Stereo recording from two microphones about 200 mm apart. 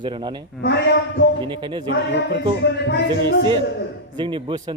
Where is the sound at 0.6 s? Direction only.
60° left (ahead or behind).